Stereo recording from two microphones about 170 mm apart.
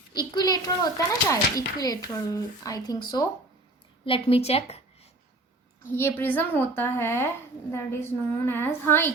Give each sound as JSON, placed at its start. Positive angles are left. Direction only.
{"t": 0.1, "sound": "a child's voice", "side_deg": 25}
{"t": 4.0, "sound": "a woman's voice", "side_deg": 35}
{"t": 5.9, "sound": "a woman's voice", "side_deg": 15}